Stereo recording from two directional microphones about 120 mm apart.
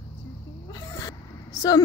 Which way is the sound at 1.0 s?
30° left (ahead or behind).